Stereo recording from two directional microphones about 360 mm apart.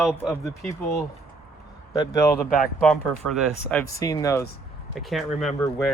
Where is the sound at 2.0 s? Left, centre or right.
Centre.